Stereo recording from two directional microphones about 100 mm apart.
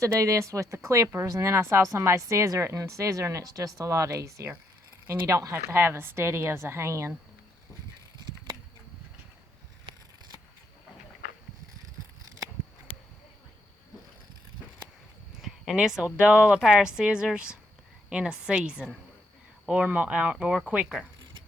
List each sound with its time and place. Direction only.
0.0 s a woman's voice: 30° right (ahead or behind)
15.4 s a sound: 5° right (ahead or behind)
16.1 s speech: 10° right (ahead or behind)